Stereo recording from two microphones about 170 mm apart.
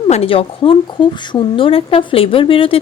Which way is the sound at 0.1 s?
35° left (ahead or behind).